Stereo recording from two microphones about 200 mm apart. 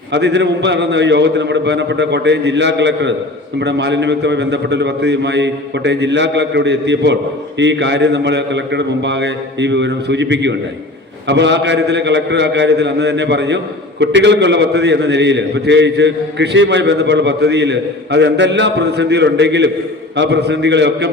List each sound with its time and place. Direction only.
0.1 s a man's voice: 60° right (ahead or behind)